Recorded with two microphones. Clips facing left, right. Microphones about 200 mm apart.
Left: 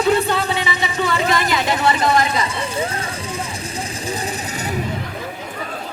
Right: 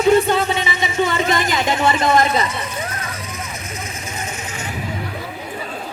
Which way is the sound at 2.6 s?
30° left (ahead or behind).